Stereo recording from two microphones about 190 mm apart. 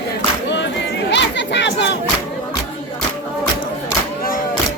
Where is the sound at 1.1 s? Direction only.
70° left (ahead or behind).